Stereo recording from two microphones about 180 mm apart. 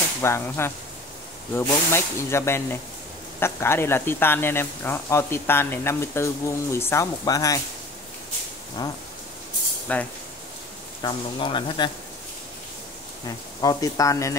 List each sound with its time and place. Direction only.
0.2 s speech: 15° left (ahead or behind)
9.9 s speech: 10° left (ahead or behind)
11.0 s speech: 25° left (ahead or behind)
13.6 s speech: 20° left (ahead or behind)